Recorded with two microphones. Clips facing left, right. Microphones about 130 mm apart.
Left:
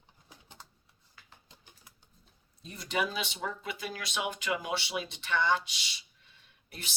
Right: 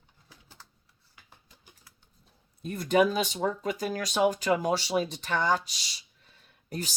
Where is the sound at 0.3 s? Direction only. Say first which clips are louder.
Left 1 dB; 20° left (ahead or behind).